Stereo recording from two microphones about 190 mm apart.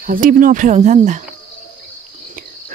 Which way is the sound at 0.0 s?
50° right (ahead or behind).